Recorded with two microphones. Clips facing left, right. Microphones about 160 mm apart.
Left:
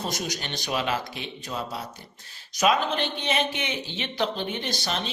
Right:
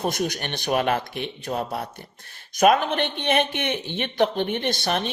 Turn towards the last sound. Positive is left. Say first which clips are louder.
# right 5 dB
turn(degrees=-55)  # may be behind; listen again after turning